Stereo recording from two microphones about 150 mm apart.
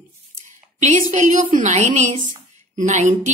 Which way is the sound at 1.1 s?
55° right (ahead or behind).